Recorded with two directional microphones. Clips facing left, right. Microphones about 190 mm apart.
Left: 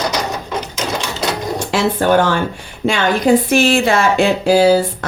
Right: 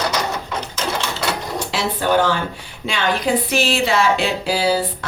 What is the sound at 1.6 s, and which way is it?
Speech, 50° left (ahead or behind).